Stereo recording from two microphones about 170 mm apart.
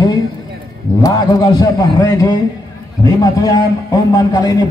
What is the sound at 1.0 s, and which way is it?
A man's voice, 20° left (ahead or behind).